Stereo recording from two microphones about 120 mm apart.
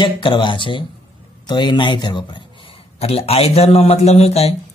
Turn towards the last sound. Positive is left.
turn(degrees=60)  # may be behind; listen again after turning